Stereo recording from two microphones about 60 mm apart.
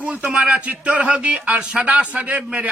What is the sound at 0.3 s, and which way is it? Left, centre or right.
A man's voice, centre.